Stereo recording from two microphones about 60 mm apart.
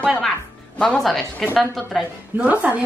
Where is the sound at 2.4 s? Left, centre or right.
Right.